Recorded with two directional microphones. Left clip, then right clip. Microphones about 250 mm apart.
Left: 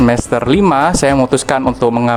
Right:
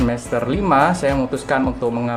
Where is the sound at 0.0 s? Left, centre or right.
Left.